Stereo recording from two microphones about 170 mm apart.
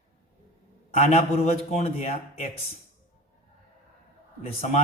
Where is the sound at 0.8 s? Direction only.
40° left (ahead or behind).